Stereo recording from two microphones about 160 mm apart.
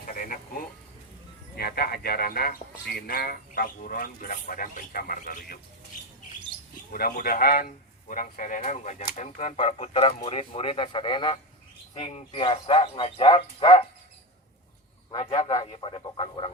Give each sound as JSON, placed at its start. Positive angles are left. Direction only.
{"t": 0.0, "sound": "a sound", "side_deg": 60}
{"t": 1.5, "sound": "a man's voice", "side_deg": 75}
{"t": 6.9, "sound": "a man's voice", "side_deg": 70}
{"t": 15.3, "sound": "a man's voice", "side_deg": 25}